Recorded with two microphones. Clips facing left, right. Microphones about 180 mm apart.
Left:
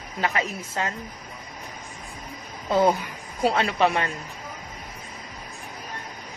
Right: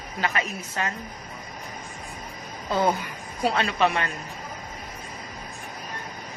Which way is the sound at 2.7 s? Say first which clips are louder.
Left 3 dB; 20° left (ahead or behind).